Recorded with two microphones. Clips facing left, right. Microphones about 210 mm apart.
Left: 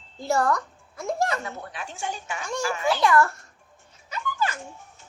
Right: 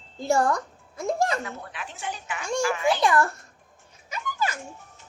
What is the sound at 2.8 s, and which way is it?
Speech, 20° right (ahead or behind).